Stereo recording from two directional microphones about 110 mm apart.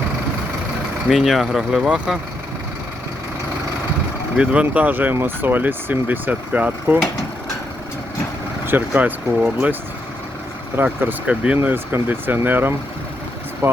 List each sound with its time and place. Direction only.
1.1 s speech: centre (ahead or behind)
4.4 s speech: 10° right (ahead or behind)
8.9 s speech: 10° right (ahead or behind)
10.8 s speech: 15° right (ahead or behind)